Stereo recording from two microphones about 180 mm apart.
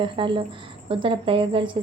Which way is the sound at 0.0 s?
30° right (ahead or behind).